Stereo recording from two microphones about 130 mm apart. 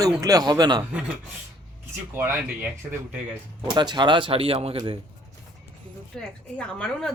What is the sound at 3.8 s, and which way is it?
Speech, 35° right (ahead or behind).